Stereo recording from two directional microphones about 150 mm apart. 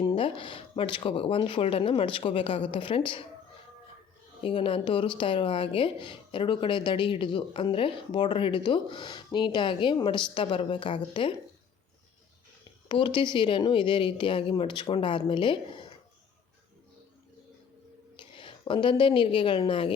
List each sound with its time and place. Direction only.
0.0 s speech: 35° left (ahead or behind)
4.4 s speech: 35° left (ahead or behind)
12.9 s speech: 30° left (ahead or behind)
18.3 s a woman's voice: 35° left (ahead or behind)